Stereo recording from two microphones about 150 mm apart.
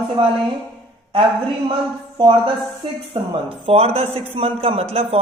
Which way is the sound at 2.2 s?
30° right (ahead or behind).